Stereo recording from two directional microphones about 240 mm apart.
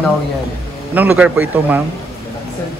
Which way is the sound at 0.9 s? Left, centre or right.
Centre.